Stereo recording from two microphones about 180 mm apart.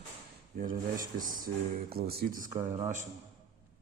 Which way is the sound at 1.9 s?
60° right (ahead or behind).